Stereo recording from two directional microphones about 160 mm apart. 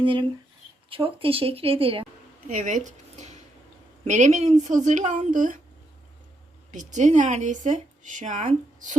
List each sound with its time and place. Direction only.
0.0 s speech: 35° right (ahead or behind)
2.5 s speech: 50° right (ahead or behind)
6.7 s speech: 50° right (ahead or behind)